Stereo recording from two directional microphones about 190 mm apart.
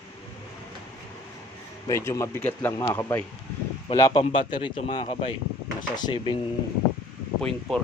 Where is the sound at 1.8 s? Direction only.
15° left (ahead or behind).